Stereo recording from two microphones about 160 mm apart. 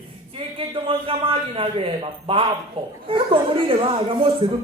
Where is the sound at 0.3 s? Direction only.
35° right (ahead or behind).